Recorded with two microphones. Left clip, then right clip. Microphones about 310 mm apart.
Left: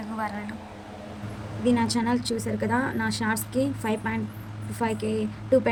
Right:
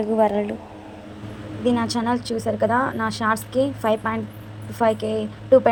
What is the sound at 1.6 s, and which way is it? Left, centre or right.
Speech, centre.